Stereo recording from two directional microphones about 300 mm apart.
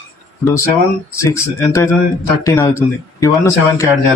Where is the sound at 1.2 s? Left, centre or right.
Centre.